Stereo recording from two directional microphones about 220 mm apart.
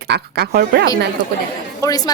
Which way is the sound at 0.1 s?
50° right (ahead or behind).